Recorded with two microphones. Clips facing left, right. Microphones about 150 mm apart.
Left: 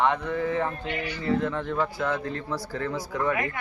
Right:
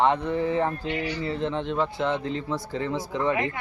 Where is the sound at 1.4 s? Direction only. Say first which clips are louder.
Right 1 dB; 25° right (ahead or behind).